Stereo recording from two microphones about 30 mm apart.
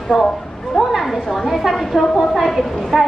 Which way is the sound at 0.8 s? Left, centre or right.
Centre.